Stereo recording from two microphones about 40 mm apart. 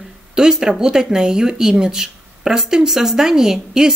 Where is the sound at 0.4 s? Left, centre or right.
Centre.